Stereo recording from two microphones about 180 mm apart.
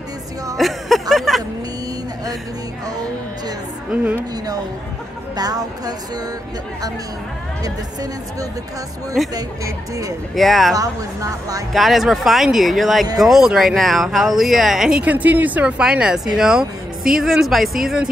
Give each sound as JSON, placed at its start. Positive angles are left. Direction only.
{"t": 0.6, "sound": "a sound", "side_deg": 0}
{"t": 3.9, "sound": "speech", "side_deg": -10}
{"t": 5.3, "sound": "speech", "side_deg": -20}
{"t": 7.6, "sound": "speech", "side_deg": -20}
{"t": 9.2, "sound": "speech", "side_deg": 0}
{"t": 10.7, "sound": "speech", "side_deg": -20}
{"t": 11.7, "sound": "speech", "side_deg": 0}